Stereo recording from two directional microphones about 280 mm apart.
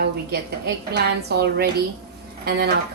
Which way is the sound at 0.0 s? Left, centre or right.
Right.